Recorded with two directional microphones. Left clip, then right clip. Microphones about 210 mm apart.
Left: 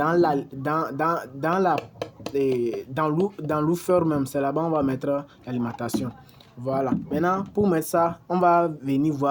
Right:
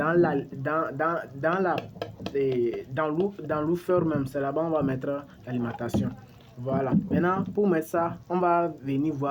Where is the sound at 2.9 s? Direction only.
50° left (ahead or behind).